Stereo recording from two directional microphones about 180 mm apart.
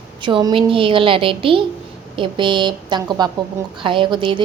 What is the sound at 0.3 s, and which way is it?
A woman's voice, 25° right (ahead or behind).